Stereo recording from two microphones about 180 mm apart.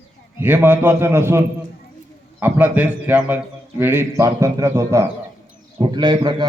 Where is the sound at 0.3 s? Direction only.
10° right (ahead or behind).